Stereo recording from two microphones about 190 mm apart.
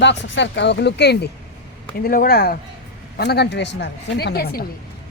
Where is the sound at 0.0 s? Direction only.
70° left (ahead or behind).